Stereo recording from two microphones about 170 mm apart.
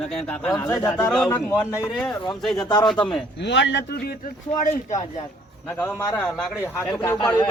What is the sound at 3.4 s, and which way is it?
Speech, 90° left.